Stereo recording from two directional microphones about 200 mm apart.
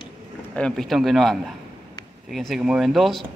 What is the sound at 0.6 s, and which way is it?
Speech, 5° left (ahead or behind).